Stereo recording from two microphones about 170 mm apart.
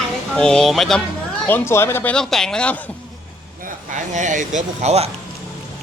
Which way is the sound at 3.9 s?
45° right (ahead or behind).